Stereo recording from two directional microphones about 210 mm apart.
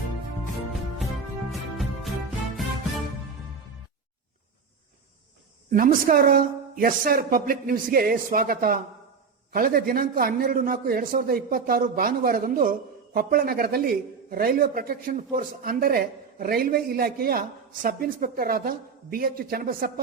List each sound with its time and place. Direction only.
1.5 s music: centre (ahead or behind)
5.7 s a man's voice: 40° right (ahead or behind)